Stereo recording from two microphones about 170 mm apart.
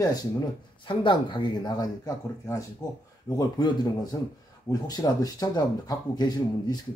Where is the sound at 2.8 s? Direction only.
5° left (ahead or behind).